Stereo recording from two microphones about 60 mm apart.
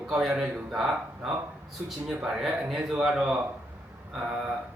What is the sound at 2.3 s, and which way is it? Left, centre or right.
Speech, centre.